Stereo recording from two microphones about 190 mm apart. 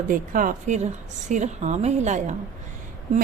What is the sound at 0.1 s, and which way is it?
A woman's voice, 45° right (ahead or behind).